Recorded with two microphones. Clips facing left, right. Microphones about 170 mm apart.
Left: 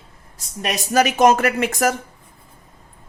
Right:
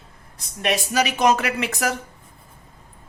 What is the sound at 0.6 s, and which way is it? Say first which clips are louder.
Speech: left 3 dB; 50° left (ahead or behind).